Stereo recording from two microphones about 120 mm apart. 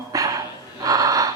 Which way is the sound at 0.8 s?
30° right (ahead or behind).